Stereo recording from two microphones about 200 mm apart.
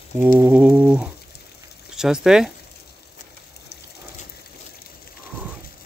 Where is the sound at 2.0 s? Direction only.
Centre (ahead or behind).